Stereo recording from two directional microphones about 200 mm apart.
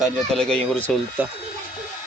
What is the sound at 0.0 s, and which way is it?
Speech, 5° left (ahead or behind).